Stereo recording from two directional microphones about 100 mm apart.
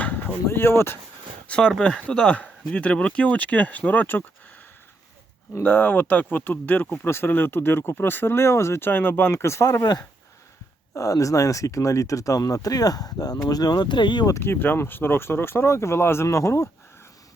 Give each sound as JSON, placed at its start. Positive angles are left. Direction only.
{"t": 0.0, "sound": "speech", "side_deg": 20}
{"t": 1.5, "sound": "speech", "side_deg": 10}
{"t": 5.5, "sound": "speech", "side_deg": 20}
{"t": 10.9, "sound": "speech", "side_deg": 35}
{"t": 14.3, "sound": "speech", "side_deg": 25}